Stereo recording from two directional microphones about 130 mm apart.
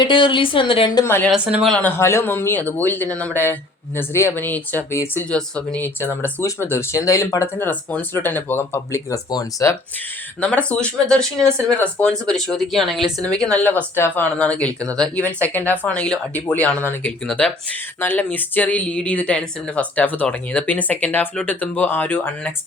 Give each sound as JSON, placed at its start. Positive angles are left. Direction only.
{"t": 0.0, "sound": "speech", "side_deg": 40}
{"t": 1.0, "sound": "speech", "side_deg": 20}
{"t": 10.7, "sound": "speech", "side_deg": 10}
{"t": 13.4, "sound": "speech", "side_deg": 10}